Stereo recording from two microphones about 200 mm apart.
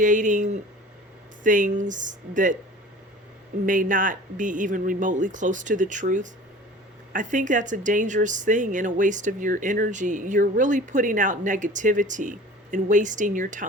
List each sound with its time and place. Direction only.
0.0 s speech: 40° right (ahead or behind)
3.7 s speech: 40° right (ahead or behind)